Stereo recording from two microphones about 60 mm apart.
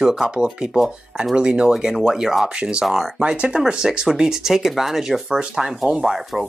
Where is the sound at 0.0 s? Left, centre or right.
Centre.